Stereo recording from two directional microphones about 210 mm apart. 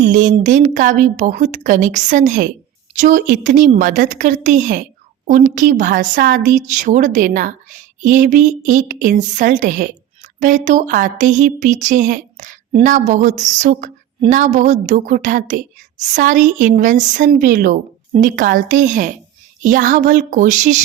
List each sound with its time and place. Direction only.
0.0 s a woman's voice: 35° right (ahead or behind)